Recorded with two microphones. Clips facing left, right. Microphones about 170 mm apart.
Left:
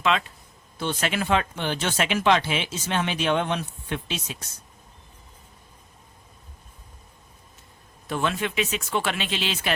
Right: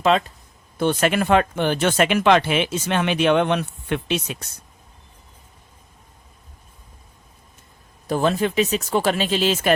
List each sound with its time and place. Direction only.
0.1 s speech: 40° right (ahead or behind)
0.8 s speech: 50° right (ahead or behind)
8.0 s speech: 35° right (ahead or behind)